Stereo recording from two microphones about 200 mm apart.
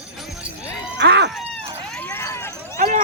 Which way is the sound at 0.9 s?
60° right (ahead or behind).